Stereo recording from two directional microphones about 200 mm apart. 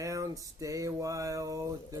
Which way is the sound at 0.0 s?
15° right (ahead or behind).